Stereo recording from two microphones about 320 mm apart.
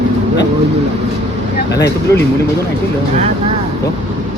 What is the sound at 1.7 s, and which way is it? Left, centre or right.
Speech, centre.